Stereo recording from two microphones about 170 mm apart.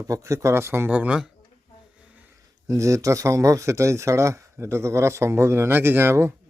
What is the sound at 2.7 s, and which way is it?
Speech, 20° right (ahead or behind).